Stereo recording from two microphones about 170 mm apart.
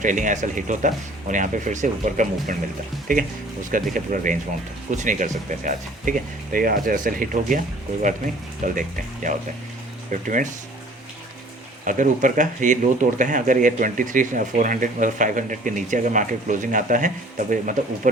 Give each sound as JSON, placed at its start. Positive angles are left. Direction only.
{"t": 0.0, "sound": "speech", "side_deg": -50}
{"t": 8.6, "sound": "speech", "side_deg": -50}
{"t": 10.1, "sound": "speech", "side_deg": -50}
{"t": 11.9, "sound": "speech", "side_deg": -50}